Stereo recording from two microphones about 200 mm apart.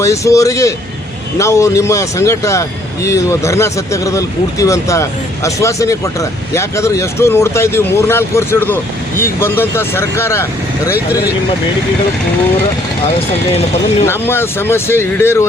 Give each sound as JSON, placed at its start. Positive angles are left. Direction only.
{"t": 0.0, "sound": "speech", "side_deg": 15}
{"t": 10.9, "sound": "speech", "side_deg": -10}
{"t": 14.1, "sound": "speech", "side_deg": 10}